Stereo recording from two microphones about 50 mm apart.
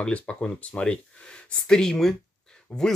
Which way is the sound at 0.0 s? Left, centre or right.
Left.